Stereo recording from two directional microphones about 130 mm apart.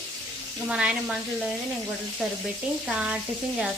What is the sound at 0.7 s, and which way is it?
Speech, 5° right (ahead or behind).